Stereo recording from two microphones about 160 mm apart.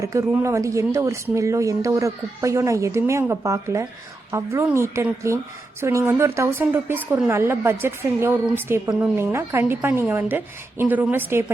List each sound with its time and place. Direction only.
0.0 s a woman's voice: 20° right (ahead or behind)